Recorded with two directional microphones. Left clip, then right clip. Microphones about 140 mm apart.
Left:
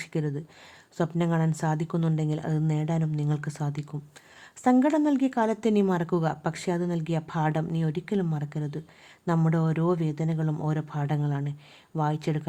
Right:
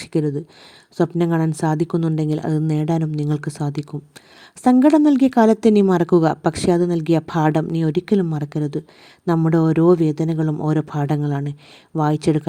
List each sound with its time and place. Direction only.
0.0 s speech: 30° right (ahead or behind)